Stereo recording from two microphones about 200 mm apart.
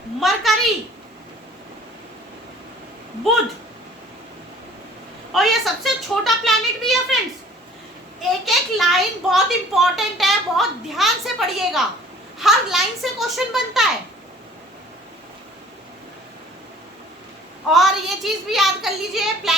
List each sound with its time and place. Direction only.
0.2 s a sound: centre (ahead or behind)
5.3 s speech: centre (ahead or behind)
8.3 s speech: centre (ahead or behind)
17.7 s speech: centre (ahead or behind)